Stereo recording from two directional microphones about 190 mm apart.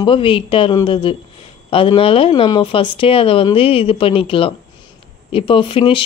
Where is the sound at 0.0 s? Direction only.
25° left (ahead or behind).